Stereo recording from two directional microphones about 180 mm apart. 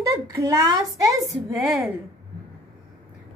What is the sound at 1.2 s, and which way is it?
Speech, centre (ahead or behind).